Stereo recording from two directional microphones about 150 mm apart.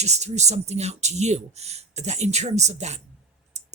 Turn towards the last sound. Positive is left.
turn(degrees=-50)  # may be behind; listen again after turning